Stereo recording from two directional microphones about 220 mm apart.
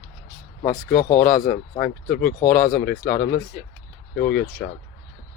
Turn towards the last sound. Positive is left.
turn(degrees=45)  # may be behind; listen again after turning